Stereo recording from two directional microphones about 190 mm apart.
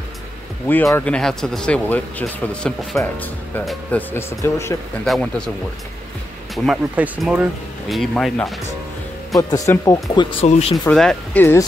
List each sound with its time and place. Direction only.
0.7 s speech: 10° left (ahead or behind)
5.0 s speech: centre (ahead or behind)
6.5 s speech: centre (ahead or behind)
9.4 s speech: 15° left (ahead or behind)
10.4 s speech: 30° left (ahead or behind)
10.9 s speech: 5° left (ahead or behind)